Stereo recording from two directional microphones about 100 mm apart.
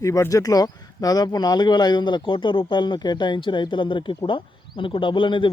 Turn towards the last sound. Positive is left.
turn(degrees=55)  # may be behind; listen again after turning